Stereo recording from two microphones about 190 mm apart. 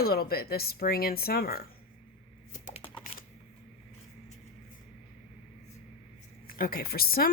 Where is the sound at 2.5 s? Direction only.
40° left (ahead or behind).